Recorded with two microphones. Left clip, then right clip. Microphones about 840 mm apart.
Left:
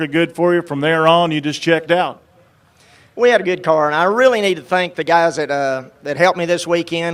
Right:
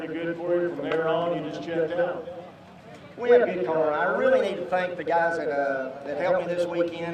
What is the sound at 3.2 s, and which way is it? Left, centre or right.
Speech, left.